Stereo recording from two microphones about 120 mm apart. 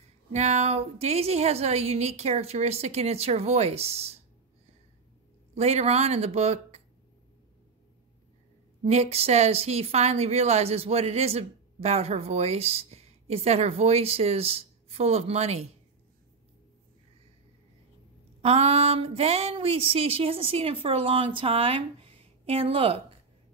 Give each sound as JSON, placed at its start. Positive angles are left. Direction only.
{"t": 0.3, "sound": "speech", "side_deg": -70}
{"t": 5.5, "sound": "speech", "side_deg": -65}
{"t": 8.8, "sound": "speech", "side_deg": -65}
{"t": 18.4, "sound": "speech", "side_deg": -60}